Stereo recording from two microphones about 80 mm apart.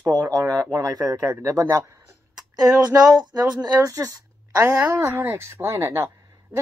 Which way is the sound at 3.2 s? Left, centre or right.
Right.